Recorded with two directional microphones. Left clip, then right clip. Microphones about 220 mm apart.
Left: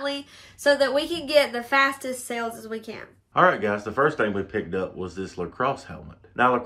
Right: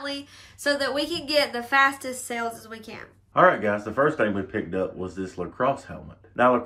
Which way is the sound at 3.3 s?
10° left (ahead or behind).